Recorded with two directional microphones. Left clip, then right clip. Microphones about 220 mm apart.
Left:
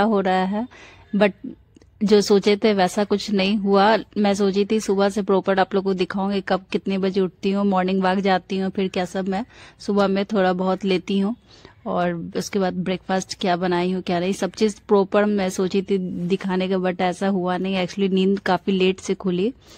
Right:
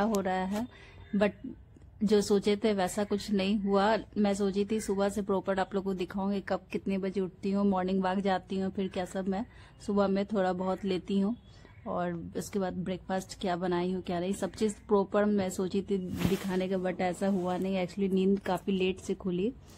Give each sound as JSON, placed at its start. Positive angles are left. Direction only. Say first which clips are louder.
{"t": 0.0, "sound": "speech", "louder": "left 11 dB", "side_deg": 35}
{"t": 2.0, "sound": "speech", "louder": "left 10 dB", "side_deg": 30}